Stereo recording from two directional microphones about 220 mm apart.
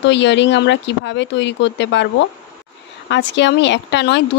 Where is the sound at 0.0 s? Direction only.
55° left (ahead or behind).